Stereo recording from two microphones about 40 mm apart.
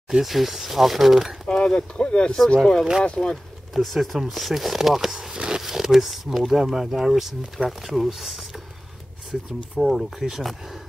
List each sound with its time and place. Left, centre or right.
0.2 s speech: centre
1.5 s speech: left
3.2 s speech: centre